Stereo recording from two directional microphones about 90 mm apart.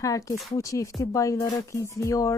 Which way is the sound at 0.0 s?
40° left (ahead or behind).